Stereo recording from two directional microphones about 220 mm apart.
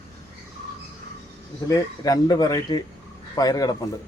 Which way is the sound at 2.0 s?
15° left (ahead or behind).